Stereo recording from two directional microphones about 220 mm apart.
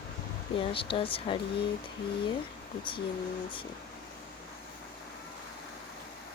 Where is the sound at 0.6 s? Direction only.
25° left (ahead or behind).